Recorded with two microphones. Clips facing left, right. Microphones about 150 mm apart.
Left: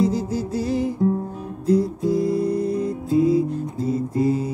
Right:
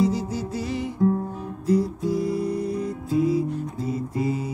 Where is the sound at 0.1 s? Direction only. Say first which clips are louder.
Left 3 dB; 40° left (ahead or behind).